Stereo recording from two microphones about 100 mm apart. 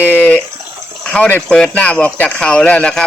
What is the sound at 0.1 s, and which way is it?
Bathtub, 15° left (ahead or behind).